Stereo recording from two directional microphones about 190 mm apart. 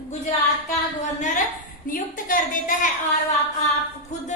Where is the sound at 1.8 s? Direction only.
45° left (ahead or behind).